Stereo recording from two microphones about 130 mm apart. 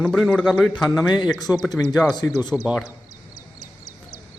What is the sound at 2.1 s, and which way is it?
Speech, 30° left (ahead or behind).